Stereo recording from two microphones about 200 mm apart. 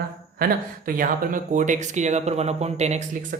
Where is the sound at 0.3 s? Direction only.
45° right (ahead or behind).